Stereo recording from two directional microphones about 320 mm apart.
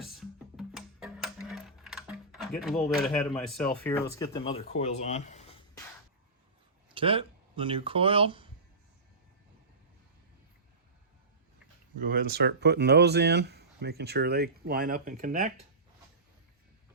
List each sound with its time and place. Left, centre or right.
0.0 s music: centre
2.6 s speech: centre
4.2 s speech: centre
6.8 s speech: centre
11.9 s speech: right